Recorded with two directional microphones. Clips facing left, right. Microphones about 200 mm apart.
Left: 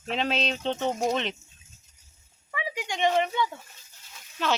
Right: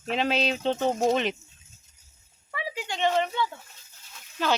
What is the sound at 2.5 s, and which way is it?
Speech, 15° left (ahead or behind).